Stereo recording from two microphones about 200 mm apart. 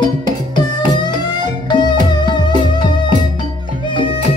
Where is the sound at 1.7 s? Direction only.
20° left (ahead or behind).